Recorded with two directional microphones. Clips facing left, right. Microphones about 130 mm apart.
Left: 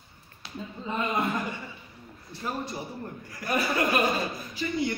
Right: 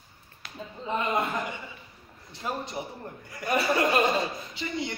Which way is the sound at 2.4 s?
20° right (ahead or behind).